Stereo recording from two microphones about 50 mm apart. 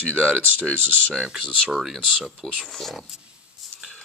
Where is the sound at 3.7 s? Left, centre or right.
Centre.